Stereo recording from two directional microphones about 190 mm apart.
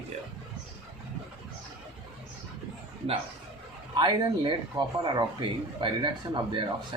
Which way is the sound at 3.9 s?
25° right (ahead or behind).